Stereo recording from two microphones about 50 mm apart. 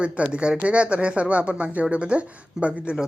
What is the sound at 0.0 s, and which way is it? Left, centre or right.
Speech, right.